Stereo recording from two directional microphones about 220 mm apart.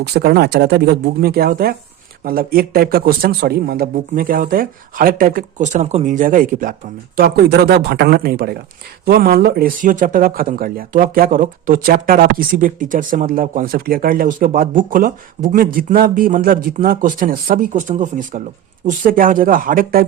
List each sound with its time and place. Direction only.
0.0 s speech: 45° right (ahead or behind)